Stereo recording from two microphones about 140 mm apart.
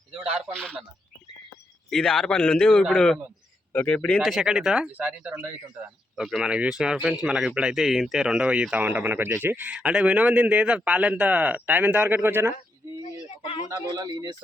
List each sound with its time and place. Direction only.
0.3 s speech: 5° left (ahead or behind)
1.9 s speech: 5° left (ahead or behind); by 12.5 s 15° right (ahead or behind)
13.2 s a sound: 55° left (ahead or behind)
13.9 s speech: 30° right (ahead or behind)